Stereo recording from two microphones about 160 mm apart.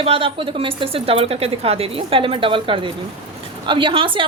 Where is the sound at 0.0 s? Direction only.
35° right (ahead or behind).